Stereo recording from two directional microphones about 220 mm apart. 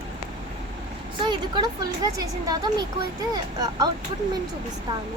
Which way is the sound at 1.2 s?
20° right (ahead or behind).